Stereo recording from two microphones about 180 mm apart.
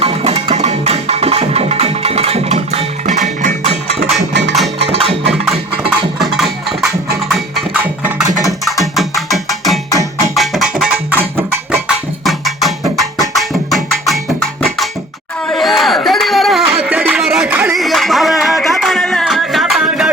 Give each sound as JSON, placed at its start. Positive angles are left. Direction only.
{"t": 0.0, "sound": "music", "side_deg": -30}
{"t": 4.8, "sound": "music", "side_deg": -30}
{"t": 5.3, "sound": "music", "side_deg": 0}
{"t": 12.2, "sound": "music", "side_deg": 0}
{"t": 15.4, "sound": "a sound", "side_deg": 0}
{"t": 17.7, "sound": "music", "side_deg": 0}